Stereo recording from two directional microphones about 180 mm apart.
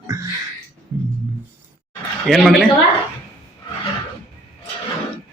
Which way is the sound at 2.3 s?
Centre (ahead or behind).